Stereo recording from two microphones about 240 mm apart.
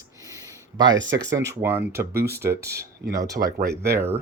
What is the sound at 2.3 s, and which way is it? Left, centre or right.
Speech, centre.